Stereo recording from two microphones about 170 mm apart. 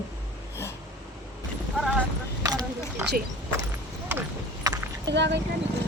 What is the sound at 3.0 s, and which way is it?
Speech, 10° right (ahead or behind).